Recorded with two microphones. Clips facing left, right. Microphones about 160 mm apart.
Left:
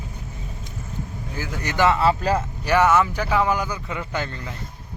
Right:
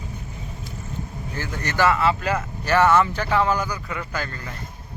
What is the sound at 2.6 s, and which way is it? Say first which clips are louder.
Speech: right 1 dB; 15° left (ahead or behind).